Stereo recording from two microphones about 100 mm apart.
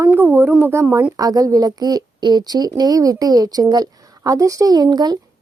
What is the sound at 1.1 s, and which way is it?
A woman's voice, 40° right (ahead or behind).